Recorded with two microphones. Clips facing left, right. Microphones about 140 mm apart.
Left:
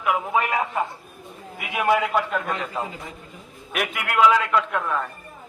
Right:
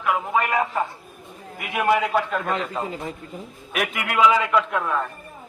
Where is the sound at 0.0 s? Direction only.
10° left (ahead or behind).